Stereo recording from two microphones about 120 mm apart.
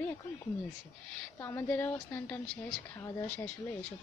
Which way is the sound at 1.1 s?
15° left (ahead or behind).